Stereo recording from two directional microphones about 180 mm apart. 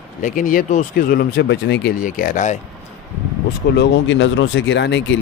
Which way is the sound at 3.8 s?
90° left.